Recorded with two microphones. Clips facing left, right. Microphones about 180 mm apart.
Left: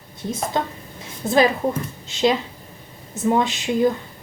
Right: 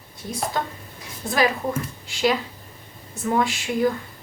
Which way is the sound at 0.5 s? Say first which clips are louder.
Left 3 dB; 20° left (ahead or behind).